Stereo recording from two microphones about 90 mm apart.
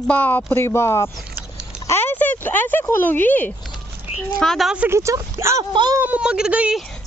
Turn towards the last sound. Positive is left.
turn(degrees=-10)  # may be behind; listen again after turning